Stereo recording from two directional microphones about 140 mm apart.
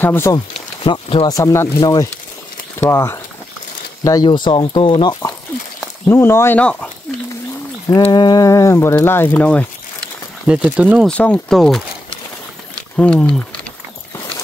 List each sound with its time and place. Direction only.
0.0 s speech: 15° left (ahead or behind)
0.8 s speech: 40° left (ahead or behind)
1.2 s speech: 25° left (ahead or behind)
6.0 s speech: 15° left (ahead or behind)
8.1 s speech: 30° left (ahead or behind); by 9.7 s 10° left (ahead or behind)
10.4 s speech: 10° right (ahead or behind)
11.1 s speech: 10° left (ahead or behind)
12.9 s speech: 10° left (ahead or behind)